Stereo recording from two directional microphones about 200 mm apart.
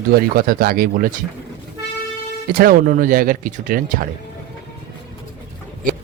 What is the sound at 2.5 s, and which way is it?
Speech, 45° right (ahead or behind).